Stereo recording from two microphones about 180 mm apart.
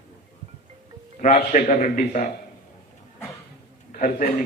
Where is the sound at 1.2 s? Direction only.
45° left (ahead or behind).